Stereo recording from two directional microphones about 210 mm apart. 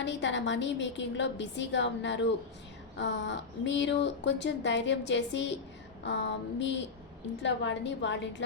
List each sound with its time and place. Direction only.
0.0 s speech: 60° left (ahead or behind)